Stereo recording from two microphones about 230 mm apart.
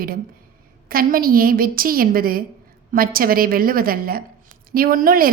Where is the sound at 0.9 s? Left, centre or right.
Right.